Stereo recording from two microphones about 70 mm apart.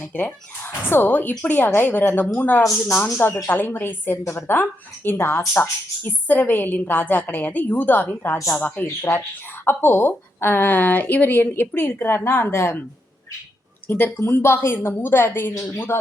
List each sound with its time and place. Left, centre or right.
0.1 s a woman's voice: left
2.6 s a woman's voice: left
3.6 s a woman's voice: left
13.8 s a woman's voice: left